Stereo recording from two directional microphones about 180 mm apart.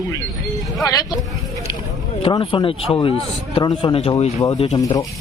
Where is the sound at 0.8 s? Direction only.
20° left (ahead or behind).